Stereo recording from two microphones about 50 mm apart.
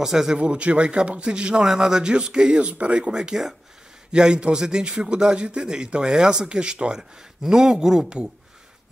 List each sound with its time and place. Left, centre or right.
0.0 s a man's voice: centre
0.4 s a man's voice: right